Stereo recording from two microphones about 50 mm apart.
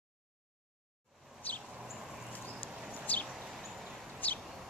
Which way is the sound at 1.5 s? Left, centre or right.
Left.